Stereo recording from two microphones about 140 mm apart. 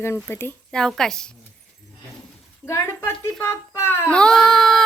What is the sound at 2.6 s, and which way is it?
Speech, 20° left (ahead or behind).